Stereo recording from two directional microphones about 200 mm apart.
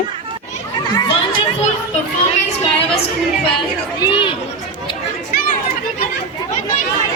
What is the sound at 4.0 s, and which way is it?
Chatter, 25° left (ahead or behind).